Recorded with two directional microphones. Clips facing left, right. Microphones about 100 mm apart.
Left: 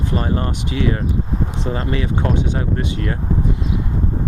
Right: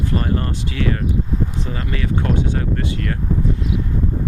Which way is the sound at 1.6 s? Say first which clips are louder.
Left 3 dB; 30° left (ahead or behind).